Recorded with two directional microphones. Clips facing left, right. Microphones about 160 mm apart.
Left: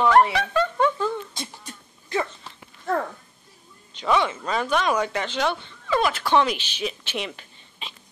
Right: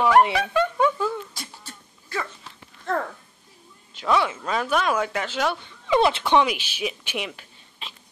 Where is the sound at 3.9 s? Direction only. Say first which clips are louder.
Even; 5° right (ahead or behind).